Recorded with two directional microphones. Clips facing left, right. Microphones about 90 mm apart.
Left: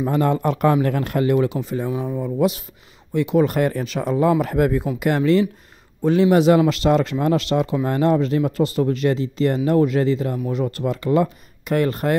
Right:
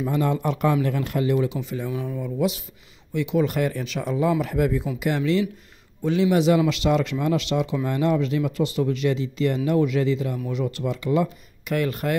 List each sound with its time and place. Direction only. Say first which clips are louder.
0.0 s speech: left 4 dB; 45° left (ahead or behind)
1.6 s a man's voice: left 5 dB; 40° left (ahead or behind)